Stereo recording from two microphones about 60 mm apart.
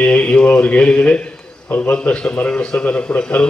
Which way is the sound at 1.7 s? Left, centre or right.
Left.